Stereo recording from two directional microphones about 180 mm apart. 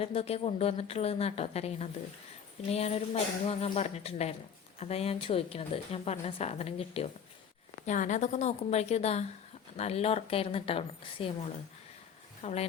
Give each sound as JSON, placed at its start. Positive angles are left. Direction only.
{"t": 0.0, "sound": "a woman's voice", "side_deg": 35}